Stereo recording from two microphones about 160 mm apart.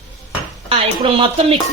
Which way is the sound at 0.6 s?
35° right (ahead or behind).